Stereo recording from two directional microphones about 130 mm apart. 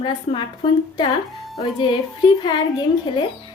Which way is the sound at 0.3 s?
40° left (ahead or behind).